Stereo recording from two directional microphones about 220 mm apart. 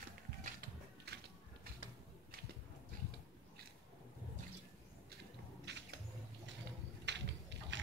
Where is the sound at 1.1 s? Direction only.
50° right (ahead or behind).